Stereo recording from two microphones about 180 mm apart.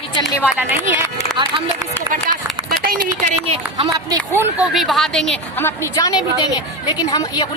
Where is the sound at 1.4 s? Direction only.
30° right (ahead or behind).